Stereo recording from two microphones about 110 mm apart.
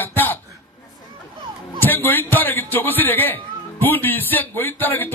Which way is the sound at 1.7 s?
20° left (ahead or behind).